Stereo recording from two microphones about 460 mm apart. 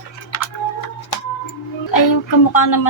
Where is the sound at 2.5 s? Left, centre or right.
Left.